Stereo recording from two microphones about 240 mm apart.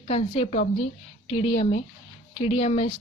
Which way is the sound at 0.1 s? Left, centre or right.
Left.